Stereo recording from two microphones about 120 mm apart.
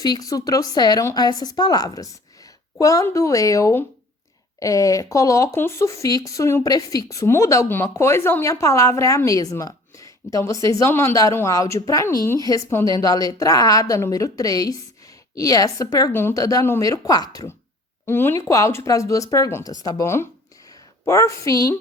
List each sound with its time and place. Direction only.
0.0 s speech: 30° left (ahead or behind)
12.4 s speech: 30° left (ahead or behind)
18.0 s speech: 20° left (ahead or behind)